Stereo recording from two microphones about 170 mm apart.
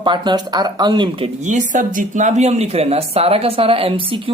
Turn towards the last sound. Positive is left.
turn(degrees=-30)  # may be behind; listen again after turning